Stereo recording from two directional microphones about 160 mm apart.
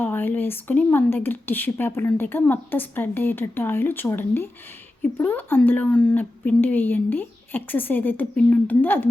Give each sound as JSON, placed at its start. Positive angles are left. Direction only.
{"t": 0.0, "sound": "a woman's voice", "side_deg": 15}